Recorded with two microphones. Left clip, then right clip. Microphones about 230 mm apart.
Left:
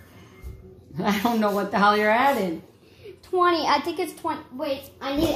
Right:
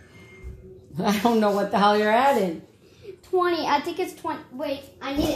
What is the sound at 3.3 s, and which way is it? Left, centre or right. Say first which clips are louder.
A woman's voice: left 2 dB; centre.